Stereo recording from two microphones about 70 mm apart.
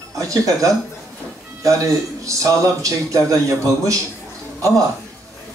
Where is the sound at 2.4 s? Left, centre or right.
Right.